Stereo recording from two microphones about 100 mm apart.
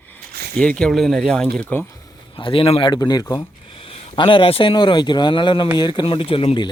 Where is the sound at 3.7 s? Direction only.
70° left (ahead or behind); by 6.0 s 50° left (ahead or behind).